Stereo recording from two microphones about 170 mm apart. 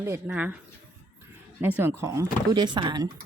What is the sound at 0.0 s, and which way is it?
Speech, 10° right (ahead or behind).